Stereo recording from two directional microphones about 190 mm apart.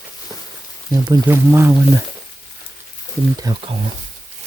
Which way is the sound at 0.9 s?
20° right (ahead or behind).